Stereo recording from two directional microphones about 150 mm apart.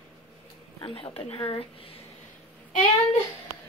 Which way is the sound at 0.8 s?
35° left (ahead or behind).